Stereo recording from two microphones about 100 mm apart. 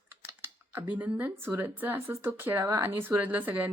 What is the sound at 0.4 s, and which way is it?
Speech, 20° right (ahead or behind).